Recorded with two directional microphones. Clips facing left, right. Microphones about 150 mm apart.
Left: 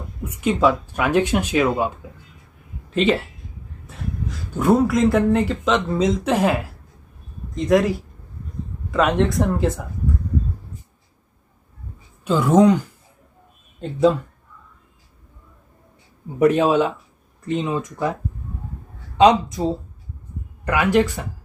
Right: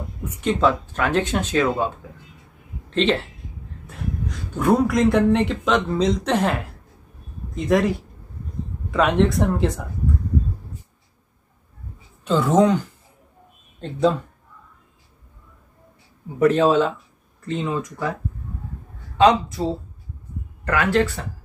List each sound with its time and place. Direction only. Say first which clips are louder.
0.2 s speech: left 1 dB; 10° left (ahead or behind)
2.9 s speech: left 1 dB; 5° left (ahead or behind)
8.9 s speech: even; centre (ahead or behind)
12.3 s speech: left 2 dB; 10° left (ahead or behind)
16.3 s speech: even; 15° left (ahead or behind)
19.1 s speech: left 2 dB; 15° left (ahead or behind)